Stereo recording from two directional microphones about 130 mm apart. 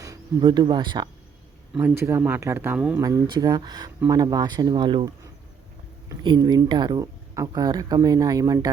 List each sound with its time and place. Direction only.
0.0 s a sound: 25° right (ahead or behind)
0.4 s speech: 35° right (ahead or behind)
1.8 s speech: 20° right (ahead or behind)
3.0 s speech: 25° right (ahead or behind)
6.2 s speech: 35° right (ahead or behind)